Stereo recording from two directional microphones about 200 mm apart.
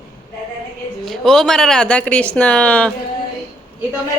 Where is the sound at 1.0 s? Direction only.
Centre (ahead or behind).